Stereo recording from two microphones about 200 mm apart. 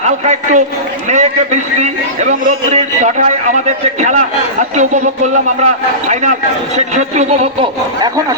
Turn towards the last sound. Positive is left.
turn(degrees=-35)  # may be behind; listen again after turning